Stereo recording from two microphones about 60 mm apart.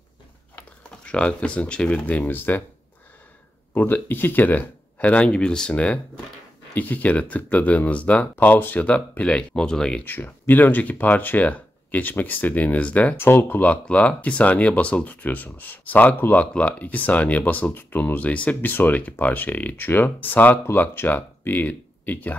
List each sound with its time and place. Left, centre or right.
1.0 s speech: centre
2.0 s speech: left
3.7 s speech: left; by 10.0 s centre
10.0 s speech: left
13.2 s speech: left
13.7 s speech: left